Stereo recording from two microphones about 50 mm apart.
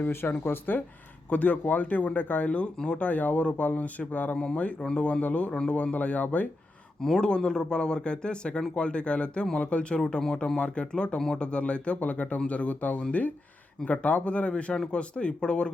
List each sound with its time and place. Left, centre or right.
0.0 s speech: left
1.3 s a man's voice: left
7.0 s a man's voice: centre